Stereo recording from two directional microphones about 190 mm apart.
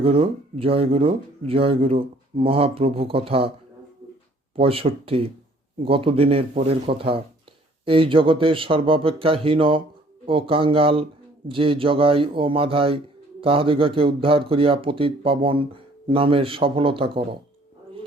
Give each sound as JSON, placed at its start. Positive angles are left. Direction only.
{"t": 0.0, "sound": "speech", "side_deg": -30}
{"t": 4.5, "sound": "speech", "side_deg": -30}